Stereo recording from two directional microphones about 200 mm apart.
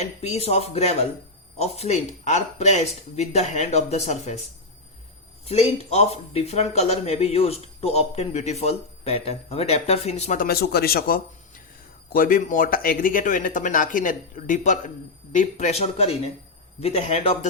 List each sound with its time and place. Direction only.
0.0 s speech: 35° left (ahead or behind)
5.5 s speech: 30° left (ahead or behind)